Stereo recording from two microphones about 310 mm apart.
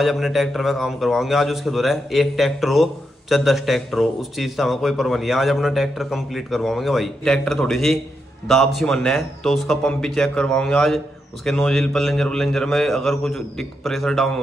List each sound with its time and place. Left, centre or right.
0.0 s a man's voice: centre